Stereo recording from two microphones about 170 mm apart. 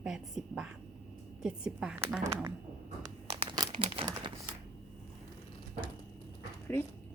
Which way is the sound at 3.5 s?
30° right (ahead or behind).